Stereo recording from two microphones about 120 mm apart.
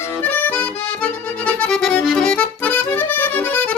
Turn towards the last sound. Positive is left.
turn(degrees=15)  # may be behind; listen again after turning